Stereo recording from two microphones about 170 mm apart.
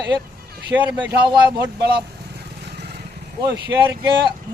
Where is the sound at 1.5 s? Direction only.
75° right (ahead or behind).